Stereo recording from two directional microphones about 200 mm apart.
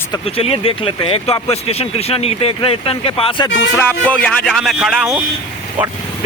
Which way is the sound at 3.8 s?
5° left (ahead or behind).